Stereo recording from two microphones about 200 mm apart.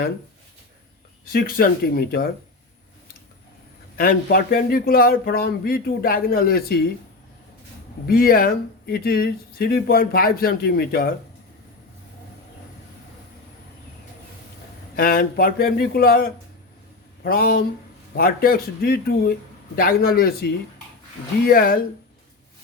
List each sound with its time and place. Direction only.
1.3 s speech: 50° left (ahead or behind)
3.9 s speech: 45° left (ahead or behind)
8.0 s speech: 45° left (ahead or behind)
14.9 s speech: 45° left (ahead or behind)